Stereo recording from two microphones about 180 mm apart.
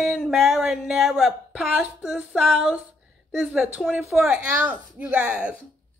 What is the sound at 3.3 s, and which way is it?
Speech, centre (ahead or behind).